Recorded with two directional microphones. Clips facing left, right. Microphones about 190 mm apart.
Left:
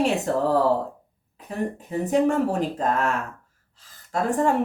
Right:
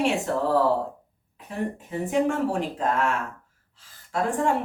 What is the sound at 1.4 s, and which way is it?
Speech, 40° left (ahead or behind).